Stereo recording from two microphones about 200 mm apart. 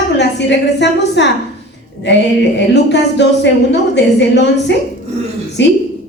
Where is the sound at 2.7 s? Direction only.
60° left (ahead or behind).